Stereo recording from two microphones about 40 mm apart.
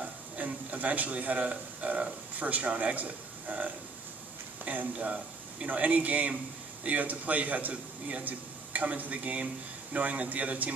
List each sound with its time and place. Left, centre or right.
0.7 s a man's voice: right